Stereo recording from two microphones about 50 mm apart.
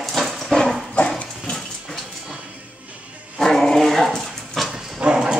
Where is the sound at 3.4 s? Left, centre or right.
Centre.